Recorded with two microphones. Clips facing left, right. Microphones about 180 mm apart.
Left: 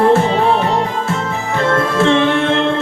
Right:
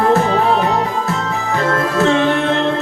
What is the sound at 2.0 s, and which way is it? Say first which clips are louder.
Music: even; 40° right (ahead or behind).